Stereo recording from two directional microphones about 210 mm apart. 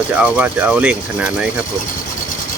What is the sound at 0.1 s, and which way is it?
Speech, 5° right (ahead or behind).